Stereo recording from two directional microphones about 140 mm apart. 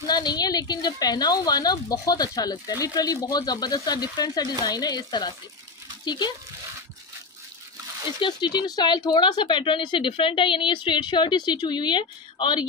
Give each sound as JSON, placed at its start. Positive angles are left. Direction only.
{"t": 0.0, "sound": "a woman's voice", "side_deg": 30}
{"t": 8.2, "sound": "speech", "side_deg": 35}